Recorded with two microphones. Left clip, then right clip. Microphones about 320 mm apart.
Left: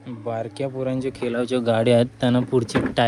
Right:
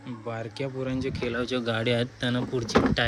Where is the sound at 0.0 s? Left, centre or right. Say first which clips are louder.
Left 7 dB; centre.